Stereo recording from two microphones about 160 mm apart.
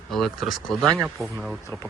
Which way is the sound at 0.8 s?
20° right (ahead or behind).